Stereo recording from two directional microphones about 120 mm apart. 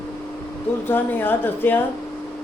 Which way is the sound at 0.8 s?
15° left (ahead or behind).